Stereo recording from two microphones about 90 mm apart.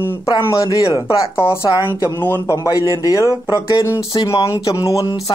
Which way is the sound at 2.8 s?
35° right (ahead or behind).